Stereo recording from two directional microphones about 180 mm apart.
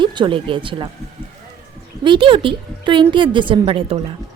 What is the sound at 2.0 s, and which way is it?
A woman's voice, 25° right (ahead or behind).